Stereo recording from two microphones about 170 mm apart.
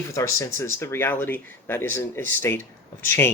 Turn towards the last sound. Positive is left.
turn(degrees=15)  # may be behind; listen again after turning